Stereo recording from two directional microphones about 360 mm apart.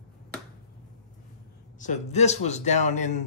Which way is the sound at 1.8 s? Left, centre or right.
Centre.